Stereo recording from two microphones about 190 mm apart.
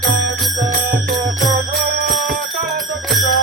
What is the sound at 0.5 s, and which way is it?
Music, 40° right (ahead or behind).